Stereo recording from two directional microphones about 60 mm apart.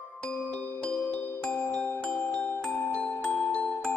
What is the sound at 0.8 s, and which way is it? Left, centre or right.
Music, left.